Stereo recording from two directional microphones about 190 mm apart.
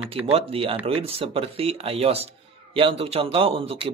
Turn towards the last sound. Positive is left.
turn(degrees=-30)  # may be behind; listen again after turning